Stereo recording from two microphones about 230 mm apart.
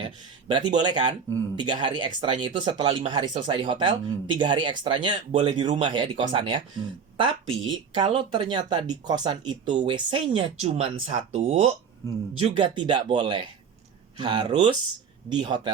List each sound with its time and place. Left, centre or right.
0.0 s speech: right